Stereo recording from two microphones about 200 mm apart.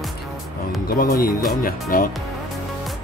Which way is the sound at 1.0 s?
45° left (ahead or behind).